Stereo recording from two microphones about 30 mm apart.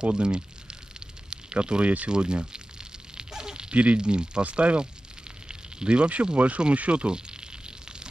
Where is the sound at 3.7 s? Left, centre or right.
Right.